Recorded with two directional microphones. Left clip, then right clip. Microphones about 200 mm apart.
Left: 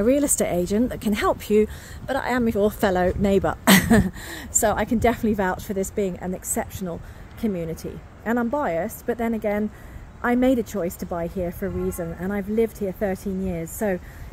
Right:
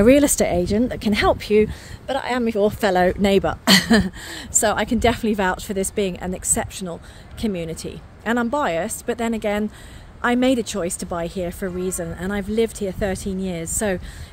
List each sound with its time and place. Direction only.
0.0 s speech: 25° right (ahead or behind)
0.4 s a woman's voice: 10° right (ahead or behind)